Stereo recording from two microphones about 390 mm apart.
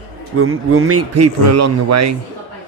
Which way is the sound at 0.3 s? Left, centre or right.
Right.